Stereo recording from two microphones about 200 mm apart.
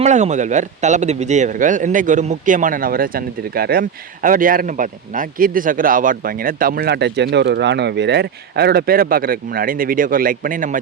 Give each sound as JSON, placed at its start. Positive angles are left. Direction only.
{"t": 0.0, "sound": "speech", "side_deg": -35}